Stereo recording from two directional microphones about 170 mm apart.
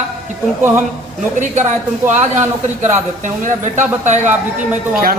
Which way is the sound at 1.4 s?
45° right (ahead or behind).